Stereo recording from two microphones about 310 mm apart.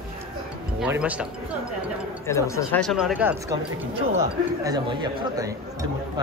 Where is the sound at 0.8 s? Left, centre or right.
Centre.